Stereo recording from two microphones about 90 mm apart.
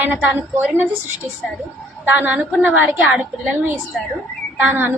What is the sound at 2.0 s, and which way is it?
Speech, 20° right (ahead or behind).